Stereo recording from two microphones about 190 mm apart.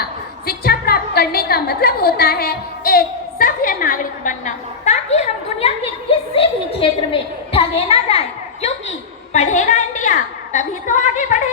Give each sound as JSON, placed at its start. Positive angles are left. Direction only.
{"t": 0.0, "sound": "a woman's voice", "side_deg": 55}
{"t": 9.3, "sound": "a woman's voice", "side_deg": 40}